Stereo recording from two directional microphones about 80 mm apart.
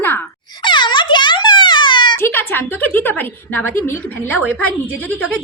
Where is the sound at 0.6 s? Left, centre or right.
Left.